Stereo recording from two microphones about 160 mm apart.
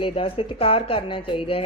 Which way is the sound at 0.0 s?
35° left (ahead or behind).